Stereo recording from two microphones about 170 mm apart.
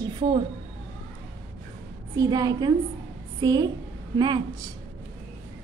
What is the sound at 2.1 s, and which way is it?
A woman's voice, 20° right (ahead or behind).